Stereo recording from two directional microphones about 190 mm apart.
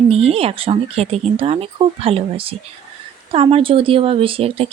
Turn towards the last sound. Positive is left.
turn(degrees=-30)  # may be behind; listen again after turning